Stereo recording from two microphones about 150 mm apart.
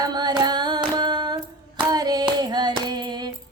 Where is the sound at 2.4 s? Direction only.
30° right (ahead or behind).